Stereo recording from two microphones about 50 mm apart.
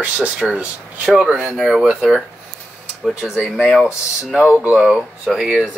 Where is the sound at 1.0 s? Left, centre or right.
Centre.